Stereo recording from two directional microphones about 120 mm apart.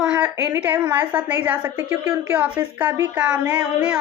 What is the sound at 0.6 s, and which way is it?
Speech, 15° right (ahead or behind).